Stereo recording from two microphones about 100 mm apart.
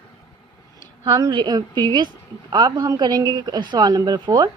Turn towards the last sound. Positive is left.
turn(degrees=-40)  # may be behind; listen again after turning